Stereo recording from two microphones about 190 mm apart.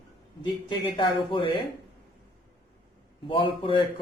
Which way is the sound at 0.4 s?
25° left (ahead or behind).